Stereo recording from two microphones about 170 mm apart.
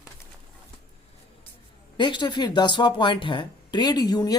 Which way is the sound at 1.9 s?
25° left (ahead or behind).